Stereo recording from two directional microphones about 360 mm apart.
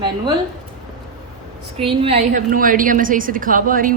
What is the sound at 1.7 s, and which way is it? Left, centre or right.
A woman's voice, centre.